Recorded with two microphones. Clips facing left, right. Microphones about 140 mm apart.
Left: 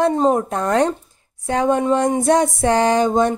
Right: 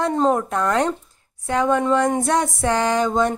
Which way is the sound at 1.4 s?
20° left (ahead or behind).